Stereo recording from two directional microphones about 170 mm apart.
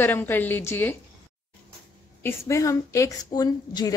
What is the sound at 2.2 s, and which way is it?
A woman's voice, 15° left (ahead or behind).